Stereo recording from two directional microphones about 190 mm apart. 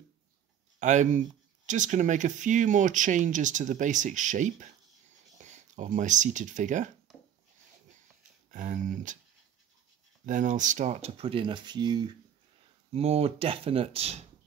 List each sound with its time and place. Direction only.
0.7 s speech: 40° right (ahead or behind)
7.1 s a sound: centre (ahead or behind)
8.5 s speech: 40° right (ahead or behind)
10.2 s speech: 40° right (ahead or behind)